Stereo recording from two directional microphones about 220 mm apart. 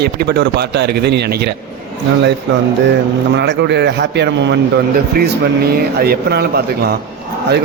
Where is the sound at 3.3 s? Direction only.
50° right (ahead or behind).